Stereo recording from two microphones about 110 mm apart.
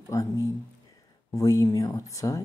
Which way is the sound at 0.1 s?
30° left (ahead or behind).